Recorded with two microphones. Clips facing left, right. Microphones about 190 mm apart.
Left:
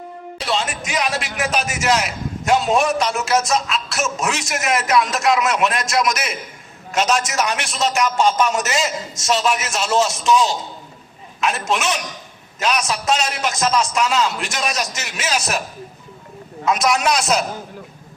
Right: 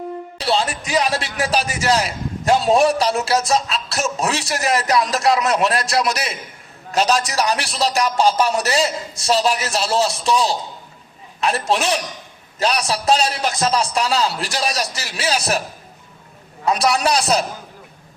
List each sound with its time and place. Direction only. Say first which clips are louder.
0.3 s a man's voice: right 2 dB; 35° right (ahead or behind)
16.6 s a man's voice: even; 35° right (ahead or behind)